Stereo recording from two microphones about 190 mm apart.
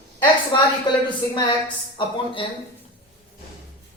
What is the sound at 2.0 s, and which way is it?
Speech, 30° left (ahead or behind).